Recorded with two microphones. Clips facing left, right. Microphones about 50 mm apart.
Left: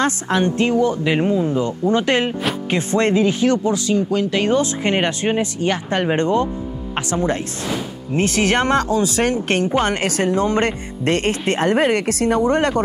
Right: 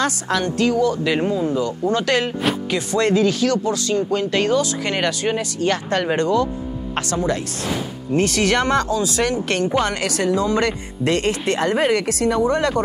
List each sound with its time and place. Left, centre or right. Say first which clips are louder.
0.0 s speech: left 2 dB; left
4.1 s speech: left 1 dB; centre
4.5 s speech: left 2 dB; left